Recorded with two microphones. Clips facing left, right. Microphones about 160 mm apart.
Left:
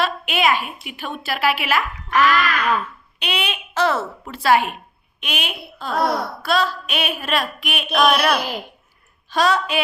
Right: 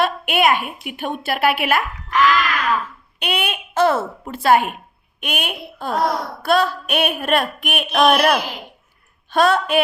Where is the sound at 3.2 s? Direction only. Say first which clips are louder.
Right 2 dB; 55° right (ahead or behind).